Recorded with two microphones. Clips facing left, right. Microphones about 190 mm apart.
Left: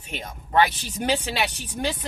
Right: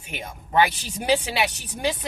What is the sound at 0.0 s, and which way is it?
Speech, 10° right (ahead or behind).